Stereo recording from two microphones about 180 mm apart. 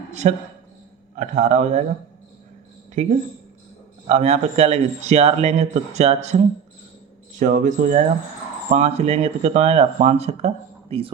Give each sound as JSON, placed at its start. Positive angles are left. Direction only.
{"t": 0.1, "sound": "a man's voice", "side_deg": -40}
{"t": 3.0, "sound": "speech", "side_deg": -40}